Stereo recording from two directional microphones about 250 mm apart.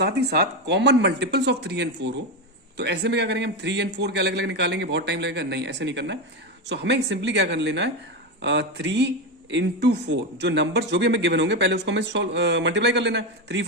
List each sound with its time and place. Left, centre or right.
0.0 s speech: right